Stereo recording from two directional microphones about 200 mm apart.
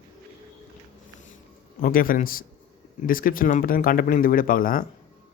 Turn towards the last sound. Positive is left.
turn(degrees=45)  # may be behind; listen again after turning